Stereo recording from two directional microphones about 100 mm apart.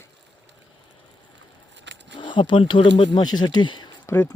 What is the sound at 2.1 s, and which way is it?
Speech, 55° left (ahead or behind).